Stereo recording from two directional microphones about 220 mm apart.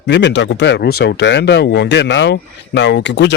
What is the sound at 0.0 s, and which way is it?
Speech, 55° left (ahead or behind).